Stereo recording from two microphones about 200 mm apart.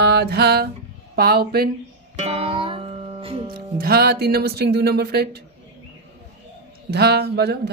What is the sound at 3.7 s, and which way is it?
Music, 50° right (ahead or behind).